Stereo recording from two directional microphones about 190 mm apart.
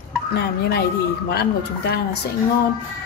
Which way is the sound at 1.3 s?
55° left (ahead or behind).